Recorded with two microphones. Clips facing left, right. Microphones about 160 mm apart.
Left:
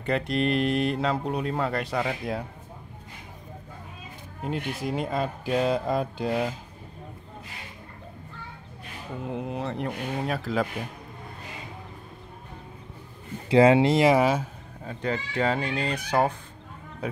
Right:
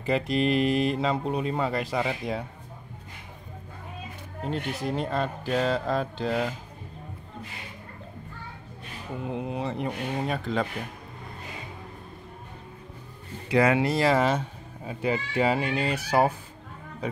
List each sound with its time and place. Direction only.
0.0 s speech: centre (ahead or behind)
4.8 s speech: 10° left (ahead or behind)
9.2 s speech: centre (ahead or behind)
13.5 s speech: 25° left (ahead or behind); by 14.5 s 10° left (ahead or behind)
14.9 s speech: 10° right (ahead or behind)